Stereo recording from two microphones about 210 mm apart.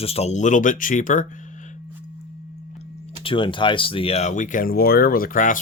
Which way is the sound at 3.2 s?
25° left (ahead or behind).